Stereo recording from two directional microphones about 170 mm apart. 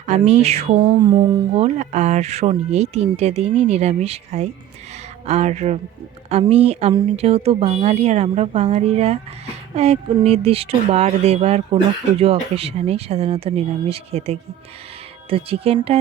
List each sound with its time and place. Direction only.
0.0 s speech: 40° right (ahead or behind); by 1.5 s 25° right (ahead or behind)
1.5 s speech: 40° right (ahead or behind)